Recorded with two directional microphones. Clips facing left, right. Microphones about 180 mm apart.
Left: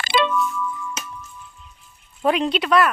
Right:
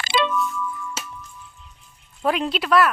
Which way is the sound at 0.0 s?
55° left (ahead or behind).